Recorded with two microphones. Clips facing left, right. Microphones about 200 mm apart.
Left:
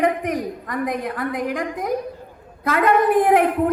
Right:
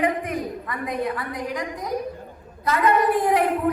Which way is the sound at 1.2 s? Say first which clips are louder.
Left 5 dB; 55° left (ahead or behind).